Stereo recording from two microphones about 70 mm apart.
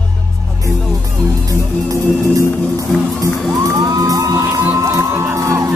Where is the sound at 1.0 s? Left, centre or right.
Right.